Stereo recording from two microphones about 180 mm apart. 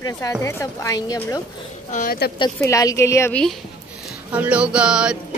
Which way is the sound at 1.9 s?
45° left (ahead or behind).